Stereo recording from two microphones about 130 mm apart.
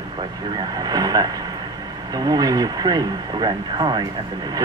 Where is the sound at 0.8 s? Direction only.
30° right (ahead or behind).